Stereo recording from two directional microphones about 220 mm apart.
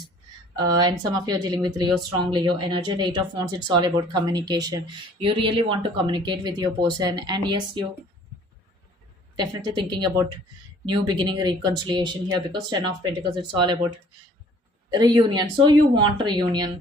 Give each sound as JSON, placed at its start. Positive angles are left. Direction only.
{"t": 0.5, "sound": "speech", "side_deg": -20}
{"t": 9.3, "sound": "speech", "side_deg": -20}
{"t": 14.9, "sound": "speech", "side_deg": -20}